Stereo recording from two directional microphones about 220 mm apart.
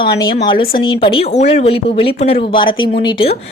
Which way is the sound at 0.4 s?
20° left (ahead or behind).